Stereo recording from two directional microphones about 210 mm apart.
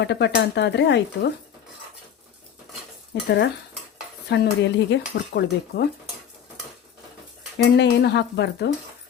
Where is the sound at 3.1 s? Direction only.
55° left (ahead or behind).